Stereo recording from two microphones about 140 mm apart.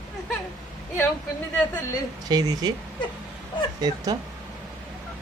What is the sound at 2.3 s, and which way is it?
Speech, 30° right (ahead or behind).